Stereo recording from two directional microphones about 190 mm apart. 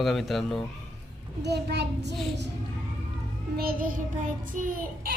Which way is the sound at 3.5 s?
50° right (ahead or behind).